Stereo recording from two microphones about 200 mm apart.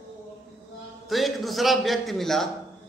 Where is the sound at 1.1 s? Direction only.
Centre (ahead or behind).